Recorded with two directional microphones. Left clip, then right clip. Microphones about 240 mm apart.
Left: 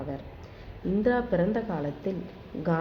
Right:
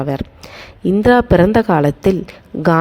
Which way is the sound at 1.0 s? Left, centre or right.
Right.